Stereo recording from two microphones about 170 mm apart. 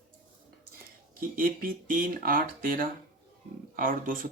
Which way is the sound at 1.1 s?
55° right (ahead or behind).